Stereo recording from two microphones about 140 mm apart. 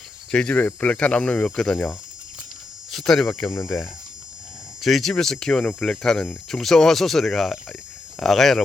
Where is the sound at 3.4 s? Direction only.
20° left (ahead or behind).